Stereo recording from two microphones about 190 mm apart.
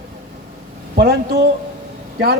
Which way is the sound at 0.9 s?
50° right (ahead or behind).